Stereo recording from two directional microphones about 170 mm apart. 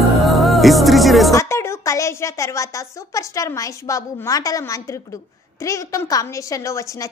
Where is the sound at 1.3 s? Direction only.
15° left (ahead or behind).